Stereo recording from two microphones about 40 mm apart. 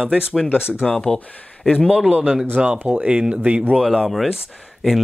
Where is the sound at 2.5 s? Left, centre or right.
Right.